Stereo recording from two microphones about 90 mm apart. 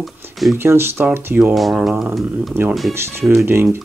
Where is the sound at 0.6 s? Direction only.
25° right (ahead or behind).